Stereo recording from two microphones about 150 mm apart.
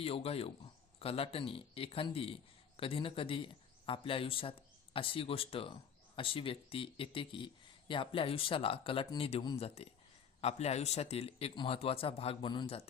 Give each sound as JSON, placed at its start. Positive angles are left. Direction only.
{"t": 0.0, "sound": "speech", "side_deg": 40}